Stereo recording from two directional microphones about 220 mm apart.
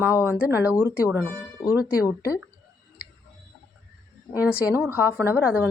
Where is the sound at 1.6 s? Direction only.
20° left (ahead or behind).